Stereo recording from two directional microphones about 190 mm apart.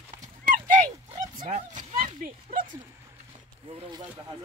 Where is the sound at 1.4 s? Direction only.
40° right (ahead or behind).